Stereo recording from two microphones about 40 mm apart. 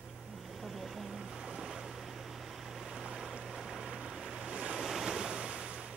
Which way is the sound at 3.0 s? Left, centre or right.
Centre.